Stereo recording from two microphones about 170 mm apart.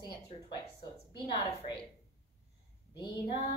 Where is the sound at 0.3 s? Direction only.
40° left (ahead or behind).